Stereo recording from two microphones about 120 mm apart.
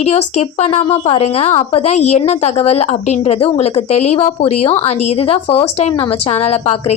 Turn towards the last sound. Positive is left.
turn(degrees=55)  # may be behind; listen again after turning